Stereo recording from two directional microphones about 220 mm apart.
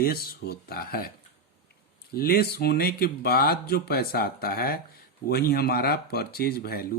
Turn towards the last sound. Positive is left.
turn(degrees=45)  # may be behind; listen again after turning